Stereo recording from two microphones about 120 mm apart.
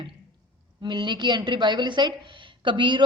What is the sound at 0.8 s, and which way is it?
A woman's voice, 40° right (ahead or behind).